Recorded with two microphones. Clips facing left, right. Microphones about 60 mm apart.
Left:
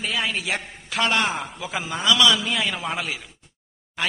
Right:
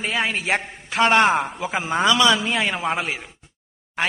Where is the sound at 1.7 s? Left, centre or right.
Right.